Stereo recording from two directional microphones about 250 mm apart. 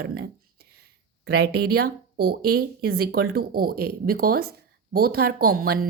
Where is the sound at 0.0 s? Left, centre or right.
Right.